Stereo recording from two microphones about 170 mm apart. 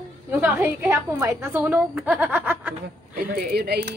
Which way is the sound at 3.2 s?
70° right (ahead or behind).